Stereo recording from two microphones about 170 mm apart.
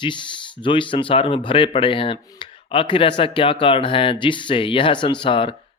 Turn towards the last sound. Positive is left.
turn(degrees=30)  # may be behind; listen again after turning